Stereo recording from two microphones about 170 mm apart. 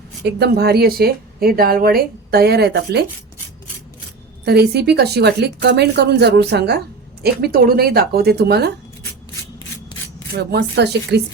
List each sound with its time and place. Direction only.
0.3 s speech: 75° right (ahead or behind)
4.4 s speech: 75° right (ahead or behind)
10.3 s speech: 75° right (ahead or behind)